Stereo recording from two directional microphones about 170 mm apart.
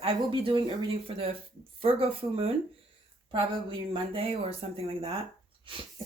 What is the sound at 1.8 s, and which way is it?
A woman's voice, 35° right (ahead or behind).